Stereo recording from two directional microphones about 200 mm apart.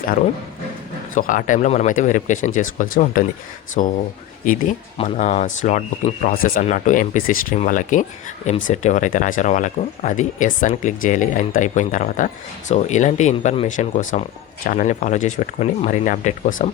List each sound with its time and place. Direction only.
1.1 s speech: 40° left (ahead or behind)
5.0 s speech: 35° left (ahead or behind)